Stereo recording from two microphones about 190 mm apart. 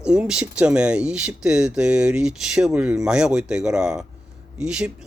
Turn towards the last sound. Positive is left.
turn(degrees=-5)  # may be behind; listen again after turning